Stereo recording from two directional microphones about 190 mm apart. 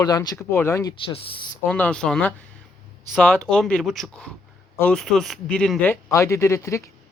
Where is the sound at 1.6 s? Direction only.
10° left (ahead or behind).